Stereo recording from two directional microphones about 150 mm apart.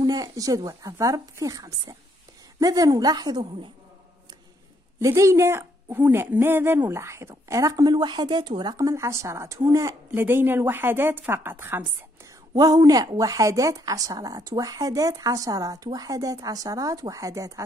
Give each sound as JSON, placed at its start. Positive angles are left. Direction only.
{"t": 0.0, "sound": "a woman's voice", "side_deg": -25}
{"t": 4.9, "sound": "a woman's voice", "side_deg": -20}
{"t": 12.5, "sound": "a woman's voice", "side_deg": -25}